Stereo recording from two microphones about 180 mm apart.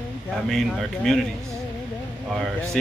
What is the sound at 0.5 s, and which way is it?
Speech, centre (ahead or behind).